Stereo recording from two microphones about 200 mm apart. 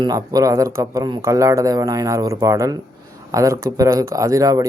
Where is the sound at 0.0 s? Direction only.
20° right (ahead or behind).